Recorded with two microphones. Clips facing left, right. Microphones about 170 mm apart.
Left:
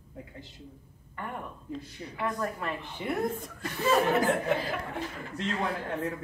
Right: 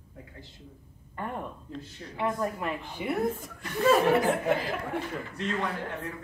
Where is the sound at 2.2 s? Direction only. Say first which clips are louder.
Right 3 dB; 20° right (ahead or behind).